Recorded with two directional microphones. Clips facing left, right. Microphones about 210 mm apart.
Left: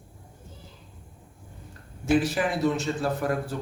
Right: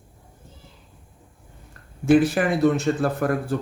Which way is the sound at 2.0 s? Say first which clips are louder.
Right 6 dB; 55° right (ahead or behind).